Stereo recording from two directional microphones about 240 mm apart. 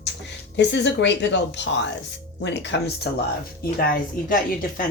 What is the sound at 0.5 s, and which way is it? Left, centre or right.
Speech, left.